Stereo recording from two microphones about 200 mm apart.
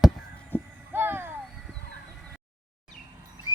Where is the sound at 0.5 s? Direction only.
10° left (ahead or behind).